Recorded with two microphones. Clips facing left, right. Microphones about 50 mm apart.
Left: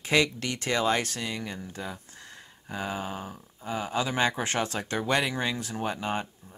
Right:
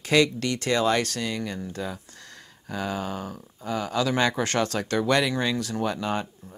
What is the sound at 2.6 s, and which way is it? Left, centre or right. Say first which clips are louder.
Speech: right 3 dB; centre.